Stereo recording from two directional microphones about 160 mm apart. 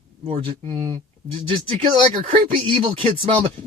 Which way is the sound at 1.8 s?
35° right (ahead or behind).